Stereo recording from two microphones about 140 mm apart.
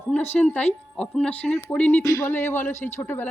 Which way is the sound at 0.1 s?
10° left (ahead or behind).